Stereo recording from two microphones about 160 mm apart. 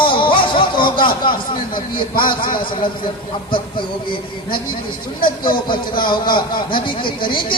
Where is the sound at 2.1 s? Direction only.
60° left (ahead or behind).